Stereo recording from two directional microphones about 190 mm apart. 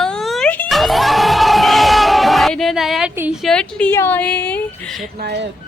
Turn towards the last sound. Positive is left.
turn(degrees=-60)  # may be behind; listen again after turning